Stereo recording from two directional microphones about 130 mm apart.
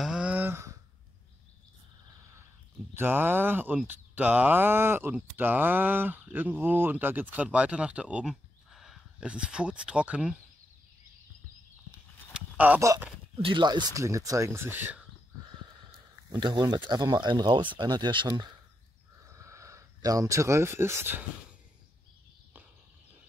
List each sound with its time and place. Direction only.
0.0 s a sound: 5° right (ahead or behind)
2.9 s speech: 15° right (ahead or behind)
12.4 s a sound: 10° right (ahead or behind)
13.4 s speech: 40° right (ahead or behind); by 15.0 s 15° right (ahead or behind)
16.3 s speech: 35° right (ahead or behind)
19.3 s speech: 25° right (ahead or behind)